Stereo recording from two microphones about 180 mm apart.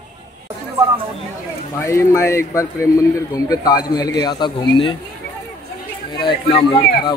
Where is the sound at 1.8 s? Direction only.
15° left (ahead or behind).